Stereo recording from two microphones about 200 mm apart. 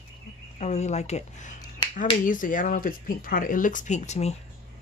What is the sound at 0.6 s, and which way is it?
Speech, 35° left (ahead or behind).